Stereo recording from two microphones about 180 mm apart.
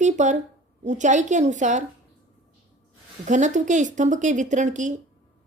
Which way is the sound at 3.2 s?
45° right (ahead or behind).